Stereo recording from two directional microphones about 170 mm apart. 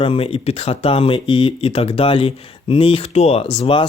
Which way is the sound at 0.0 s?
30° left (ahead or behind).